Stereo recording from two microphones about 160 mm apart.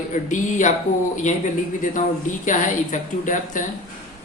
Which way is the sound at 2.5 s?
55° left (ahead or behind).